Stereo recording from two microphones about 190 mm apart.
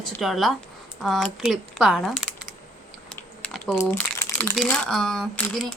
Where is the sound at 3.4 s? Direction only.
Centre (ahead or behind).